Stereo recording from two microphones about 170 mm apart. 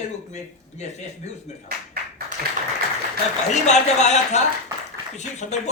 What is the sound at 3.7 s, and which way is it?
Speech, 45° left (ahead or behind).